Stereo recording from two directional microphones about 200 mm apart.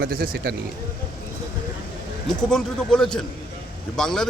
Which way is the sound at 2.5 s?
5° left (ahead or behind).